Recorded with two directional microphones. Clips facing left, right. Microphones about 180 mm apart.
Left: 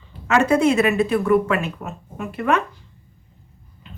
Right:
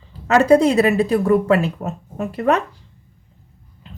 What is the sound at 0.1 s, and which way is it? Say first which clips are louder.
A woman's voice: right 5 dB; 35° right (ahead or behind).